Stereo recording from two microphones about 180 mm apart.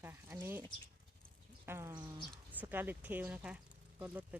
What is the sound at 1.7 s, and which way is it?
Speech, 15° right (ahead or behind).